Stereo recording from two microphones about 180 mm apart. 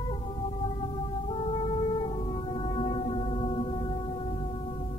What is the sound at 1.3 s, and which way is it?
Music, 30° left (ahead or behind).